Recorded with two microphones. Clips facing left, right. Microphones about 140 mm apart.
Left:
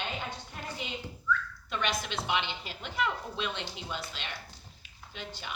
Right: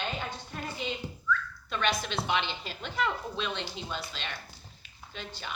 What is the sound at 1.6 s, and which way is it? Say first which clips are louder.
A woman's voice: right 3 dB; 15° left (ahead or behind).